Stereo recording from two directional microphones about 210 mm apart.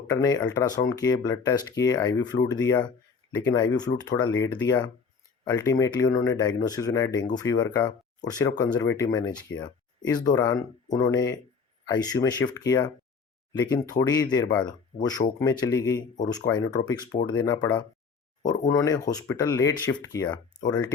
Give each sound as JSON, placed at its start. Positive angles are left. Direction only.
{"t": 0.1, "sound": "speech", "side_deg": 20}